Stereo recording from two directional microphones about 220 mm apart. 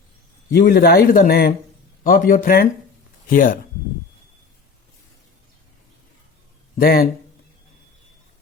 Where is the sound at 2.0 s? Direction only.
40° left (ahead or behind).